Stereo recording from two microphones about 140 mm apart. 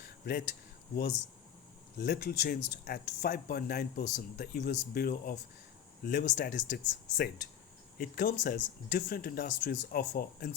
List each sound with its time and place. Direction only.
0.0 s a sound: 90° left
2.0 s speech: 90° left; by 7.3 s 70° left (ahead or behind)
7.9 s speech: 90° left